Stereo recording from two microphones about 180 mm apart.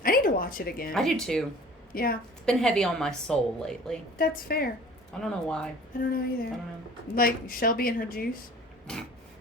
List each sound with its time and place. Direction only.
0.0 s a sound: 50° left (ahead or behind)
0.9 s a woman's voice: 5° left (ahead or behind)
1.9 s a woman's voice: 55° left (ahead or behind)
2.5 s a woman's voice: 5° left (ahead or behind)
4.2 s a woman's voice: 55° left (ahead or behind)
5.2 s a woman's voice: 5° left (ahead or behind)
6.0 s a woman's voice: 55° left (ahead or behind)
8.9 s a woman's voice: 5° left (ahead or behind)